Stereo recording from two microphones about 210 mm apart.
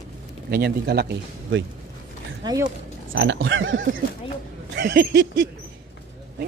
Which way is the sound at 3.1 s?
65° right (ahead or behind).